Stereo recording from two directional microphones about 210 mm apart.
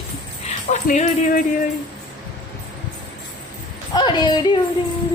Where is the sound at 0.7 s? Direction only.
35° left (ahead or behind).